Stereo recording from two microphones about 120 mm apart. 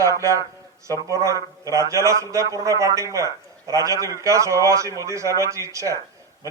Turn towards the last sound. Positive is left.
turn(degrees=-25)  # may be behind; listen again after turning